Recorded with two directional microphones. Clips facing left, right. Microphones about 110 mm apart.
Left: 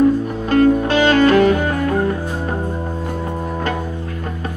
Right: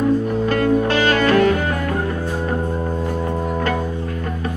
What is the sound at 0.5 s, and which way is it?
Music, 25° left (ahead or behind).